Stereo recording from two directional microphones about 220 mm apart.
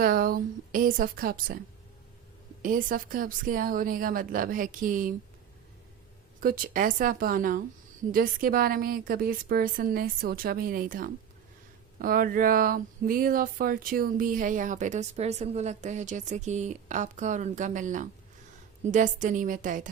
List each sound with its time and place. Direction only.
0.0 s speech: 40° right (ahead or behind)
2.6 s speech: 40° right (ahead or behind)
6.4 s speech: 40° right (ahead or behind)